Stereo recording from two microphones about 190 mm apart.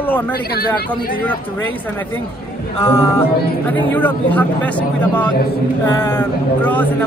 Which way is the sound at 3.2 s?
10° left (ahead or behind).